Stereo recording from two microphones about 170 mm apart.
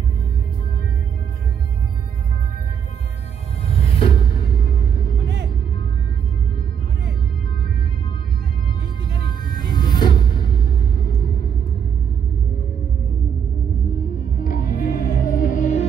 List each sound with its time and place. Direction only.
4.0 s music: 25° left (ahead or behind)
9.1 s music: 25° left (ahead or behind)
14.3 s music: 55° left (ahead or behind)